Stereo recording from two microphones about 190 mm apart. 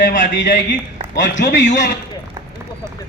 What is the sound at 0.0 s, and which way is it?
A man's voice, 45° left (ahead or behind).